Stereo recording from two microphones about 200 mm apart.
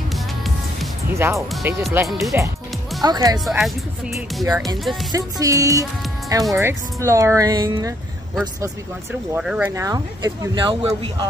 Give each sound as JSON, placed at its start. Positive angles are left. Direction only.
{"t": 1.1, "sound": "speech", "side_deg": -15}
{"t": 2.0, "sound": "speech", "side_deg": 0}
{"t": 3.0, "sound": "speech", "side_deg": -20}
{"t": 3.4, "sound": "speech", "side_deg": 0}
{"t": 5.1, "sound": "speech", "side_deg": -15}
{"t": 9.3, "sound": "speech", "side_deg": -5}
{"t": 9.7, "sound": "speech", "side_deg": -15}